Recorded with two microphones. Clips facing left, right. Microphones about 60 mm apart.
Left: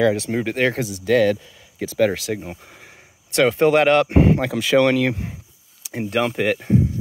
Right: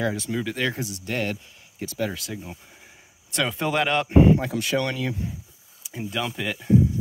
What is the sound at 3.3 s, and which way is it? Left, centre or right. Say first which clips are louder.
Speech: left 9 dB; left.